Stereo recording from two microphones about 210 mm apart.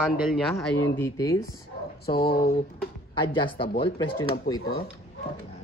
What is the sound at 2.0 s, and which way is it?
Speech, 45° left (ahead or behind).